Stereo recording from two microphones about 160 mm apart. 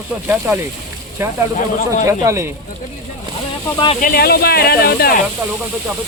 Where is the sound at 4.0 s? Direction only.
70° left (ahead or behind).